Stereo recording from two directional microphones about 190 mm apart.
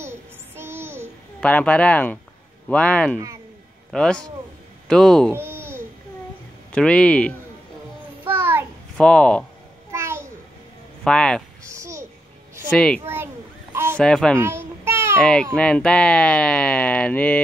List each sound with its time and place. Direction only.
0.0 s child singing: 15° right (ahead or behind)
1.4 s speech: 5° left (ahead or behind)
5.3 s babbling: 15° right (ahead or behind)
6.7 s speech: 5° left (ahead or behind)
8.3 s child singing: 10° right (ahead or behind)
8.9 s speech: 5° left (ahead or behind)
9.8 s a sound: 15° right (ahead or behind)
11.1 s speech: 5° left (ahead or behind)
11.6 s a sound: 15° right (ahead or behind)
12.7 s speech: 5° left (ahead or behind)
13.0 s a sound: 10° right (ahead or behind)
13.9 s speech: 5° left (ahead or behind)
14.4 s a sound: 15° right (ahead or behind)
15.1 s speech: 5° left (ahead or behind)